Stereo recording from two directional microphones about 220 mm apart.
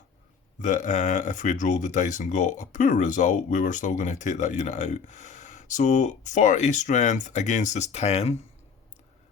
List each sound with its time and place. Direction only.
0.6 s speech: 35° left (ahead or behind)